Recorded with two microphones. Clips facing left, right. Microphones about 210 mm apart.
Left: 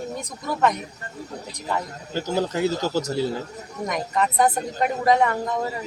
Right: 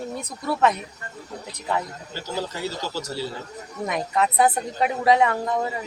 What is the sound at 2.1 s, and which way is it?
Speech, 50° left (ahead or behind).